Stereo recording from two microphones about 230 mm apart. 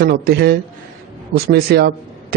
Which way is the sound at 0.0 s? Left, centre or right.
Right.